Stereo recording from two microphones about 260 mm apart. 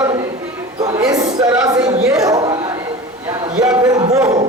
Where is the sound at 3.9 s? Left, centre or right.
Centre.